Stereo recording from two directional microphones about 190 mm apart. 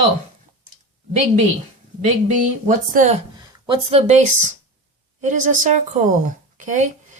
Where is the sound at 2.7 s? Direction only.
40° right (ahead or behind).